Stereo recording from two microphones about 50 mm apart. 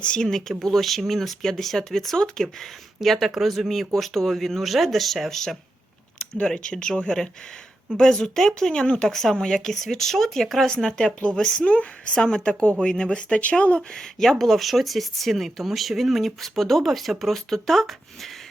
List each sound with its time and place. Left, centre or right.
0.0 s speech: centre
6.4 s speech: centre
9.0 s speech: centre
13.1 s speech: left
13.9 s speech: centre